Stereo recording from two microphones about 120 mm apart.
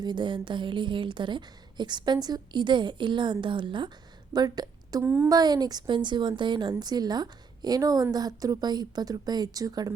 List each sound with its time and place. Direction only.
0.0 s a woman's voice: 40° right (ahead or behind)
5.0 s a woman's voice: 15° right (ahead or behind)
5.3 s a woman's voice: 35° right (ahead or behind)